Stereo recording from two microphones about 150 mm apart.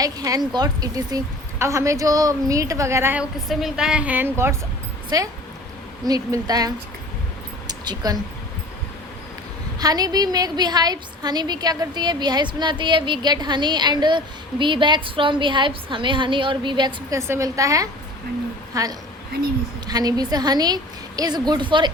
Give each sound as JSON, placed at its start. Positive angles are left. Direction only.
{"t": 0.0, "sound": "a woman's voice", "side_deg": -25}
{"t": 3.5, "sound": "a woman's voice", "side_deg": -5}
{"t": 9.8, "sound": "a woman's voice", "side_deg": -25}
{"t": 17.2, "sound": "a woman's voice", "side_deg": -20}